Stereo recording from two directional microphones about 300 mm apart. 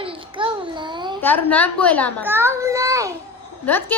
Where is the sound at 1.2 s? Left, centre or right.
Centre.